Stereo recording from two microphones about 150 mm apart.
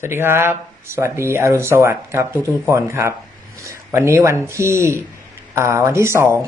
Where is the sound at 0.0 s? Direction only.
15° right (ahead or behind).